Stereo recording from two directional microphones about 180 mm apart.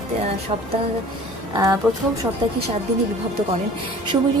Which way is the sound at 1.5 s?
20° right (ahead or behind).